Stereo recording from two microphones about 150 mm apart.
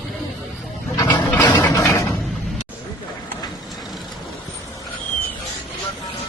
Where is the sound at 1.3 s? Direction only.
30° left (ahead or behind).